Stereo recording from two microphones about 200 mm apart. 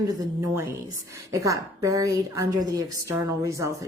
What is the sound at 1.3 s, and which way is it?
A woman's voice, 15° right (ahead or behind).